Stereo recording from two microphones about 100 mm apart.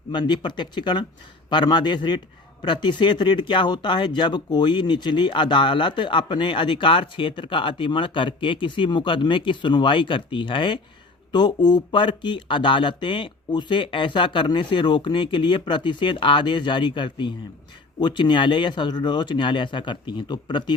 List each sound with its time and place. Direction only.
0.1 s speech: 50° left (ahead or behind)